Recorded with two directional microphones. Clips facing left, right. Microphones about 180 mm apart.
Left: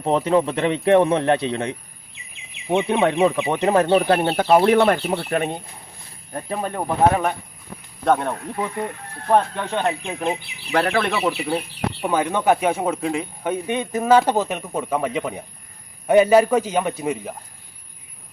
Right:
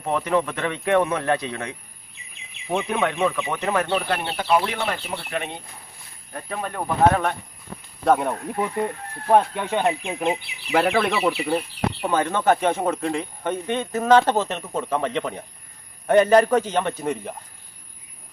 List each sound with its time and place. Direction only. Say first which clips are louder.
0.0 s a man's voice: left 4 dB; 25° left (ahead or behind)
4.0 s speech: left 8 dB; 45° left (ahead or behind)
6.3 s a man's voice: left 4 dB; 30° left (ahead or behind)
7.1 s speech: left 1 dB; 5° left (ahead or behind)
8.0 s speech: even; 5° right (ahead or behind)
12.0 s speech: left 2 dB; 10° left (ahead or behind)